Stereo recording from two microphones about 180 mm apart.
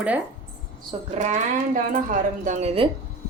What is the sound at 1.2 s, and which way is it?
A woman's voice, 40° right (ahead or behind).